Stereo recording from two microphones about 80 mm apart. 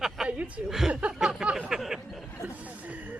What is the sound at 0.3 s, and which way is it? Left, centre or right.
Chuckle, centre.